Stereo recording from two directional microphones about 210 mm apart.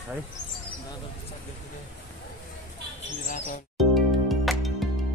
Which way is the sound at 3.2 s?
40° left (ahead or behind).